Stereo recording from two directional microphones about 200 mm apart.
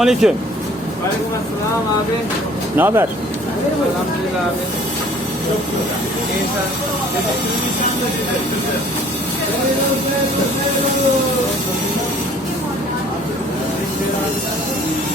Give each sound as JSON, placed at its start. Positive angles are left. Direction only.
{"t": 0.0, "sound": "speech", "side_deg": 0}
{"t": 2.7, "sound": "speech", "side_deg": -10}